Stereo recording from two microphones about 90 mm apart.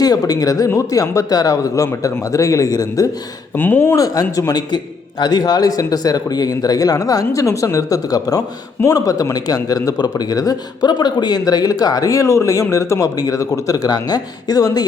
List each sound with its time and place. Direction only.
0.0 s speech: 45° left (ahead or behind)
3.5 s speech: 25° left (ahead or behind)
3.9 s speech: 40° left (ahead or behind)